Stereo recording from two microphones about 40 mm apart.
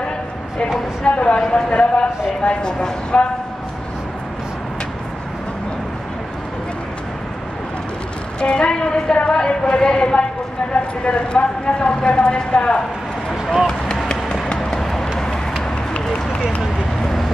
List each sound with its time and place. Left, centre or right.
1.0 s speech: left
8.4 s speech: left
14.6 s vehicle: centre
15.1 s run: centre